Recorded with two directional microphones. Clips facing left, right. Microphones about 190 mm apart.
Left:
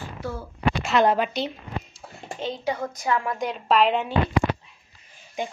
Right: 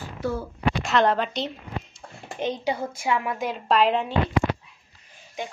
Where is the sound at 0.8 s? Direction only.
5° left (ahead or behind).